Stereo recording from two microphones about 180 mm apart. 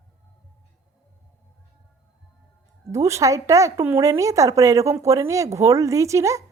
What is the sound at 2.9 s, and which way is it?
Speech, 15° right (ahead or behind).